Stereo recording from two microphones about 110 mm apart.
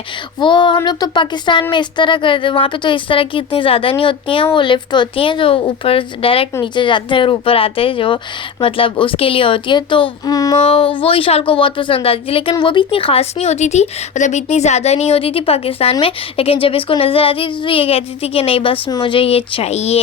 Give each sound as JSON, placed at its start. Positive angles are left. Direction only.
{"t": 0.3, "sound": "a woman's voice", "side_deg": 45}
{"t": 6.6, "sound": "a woman's voice", "side_deg": 45}
{"t": 10.3, "sound": "child singing", "side_deg": 35}
{"t": 10.6, "sound": "speech", "side_deg": 55}